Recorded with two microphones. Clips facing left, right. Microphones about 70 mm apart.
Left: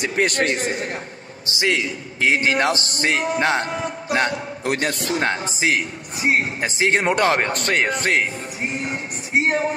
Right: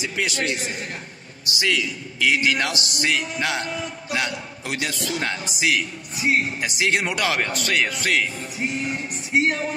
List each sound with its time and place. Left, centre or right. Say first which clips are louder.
0.0 s a man's voice: left 5 dB; left
1.8 s a man's voice: left 2 dB; left